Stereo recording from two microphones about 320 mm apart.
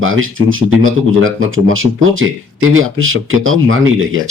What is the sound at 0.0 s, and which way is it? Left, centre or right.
Speech, right.